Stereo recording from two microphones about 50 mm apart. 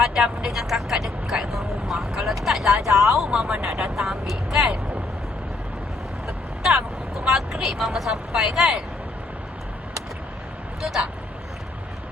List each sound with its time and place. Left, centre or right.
0.0 s vehicle: centre
6.2 s vehicle: centre
7.3 s speech: centre
10.8 s speech: centre